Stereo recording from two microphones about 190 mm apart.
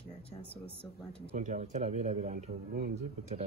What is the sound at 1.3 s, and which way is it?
Speech, 40° right (ahead or behind).